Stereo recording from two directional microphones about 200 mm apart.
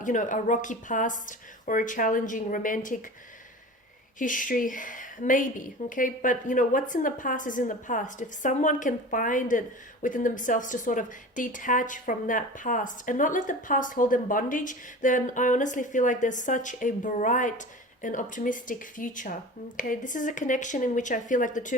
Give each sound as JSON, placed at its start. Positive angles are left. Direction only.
{"t": 0.0, "sound": "a woman's voice", "side_deg": 40}
{"t": 4.2, "sound": "a woman's voice", "side_deg": 40}